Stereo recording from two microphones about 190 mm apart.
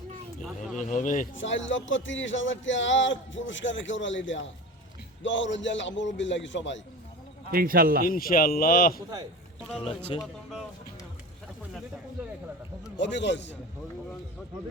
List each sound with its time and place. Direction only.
0.4 s speech: centre (ahead or behind)
0.9 s speech: 40° left (ahead or behind)
1.4 s a man's voice: 80° left
7.5 s a man's voice: 50° right (ahead or behind)
8.0 s speech: 50° left (ahead or behind)
10.1 s speech: 30° left (ahead or behind)
13.0 s a man's voice: 65° left (ahead or behind)